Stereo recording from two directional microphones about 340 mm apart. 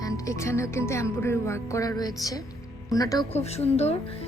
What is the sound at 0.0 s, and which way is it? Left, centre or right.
Speech, centre.